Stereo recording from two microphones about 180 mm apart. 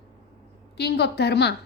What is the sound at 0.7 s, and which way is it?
Speech, 65° left (ahead or behind).